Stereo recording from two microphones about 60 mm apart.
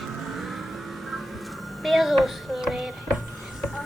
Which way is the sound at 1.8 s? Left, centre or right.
Centre.